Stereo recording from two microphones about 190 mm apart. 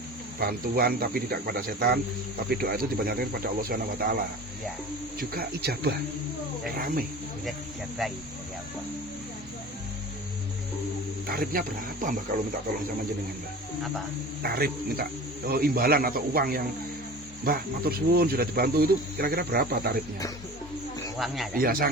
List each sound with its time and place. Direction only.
0.3 s speech: 50° right (ahead or behind)
5.3 s speech: 55° right (ahead or behind)
11.3 s speech: 50° right (ahead or behind)
14.4 s speech: 55° right (ahead or behind)
21.2 s speech: centre (ahead or behind)
21.5 s speech: 50° right (ahead or behind)